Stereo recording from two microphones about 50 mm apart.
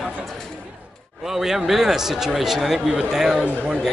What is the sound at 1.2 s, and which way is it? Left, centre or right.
Speech, centre.